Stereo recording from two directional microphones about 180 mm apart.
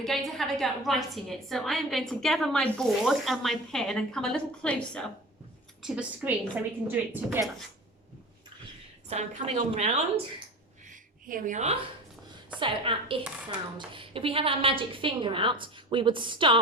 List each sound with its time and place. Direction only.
0.0 s a woman's voice: centre (ahead or behind)
5.8 s a woman's voice: 5° right (ahead or behind)
9.0 s a woman's voice: 35° right (ahead or behind)
10.8 s a sound: 45° right (ahead or behind)
12.5 s a woman's voice: 30° right (ahead or behind)